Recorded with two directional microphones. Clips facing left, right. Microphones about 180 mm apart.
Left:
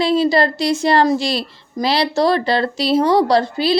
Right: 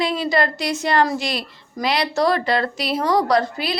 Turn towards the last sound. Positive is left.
turn(degrees=30)  # may be behind; listen again after turning